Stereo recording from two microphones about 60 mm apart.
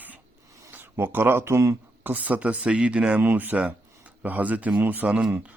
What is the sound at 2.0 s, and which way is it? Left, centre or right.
Speech, right.